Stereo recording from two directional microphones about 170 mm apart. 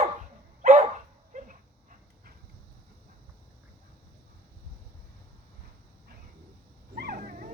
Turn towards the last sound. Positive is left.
turn(degrees=-55)  # may be behind; listen again after turning